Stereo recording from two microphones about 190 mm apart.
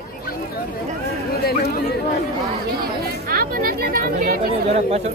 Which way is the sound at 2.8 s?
50° right (ahead or behind).